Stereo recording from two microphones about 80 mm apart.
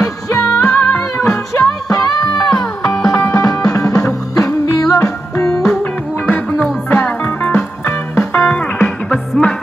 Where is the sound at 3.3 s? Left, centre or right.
Left.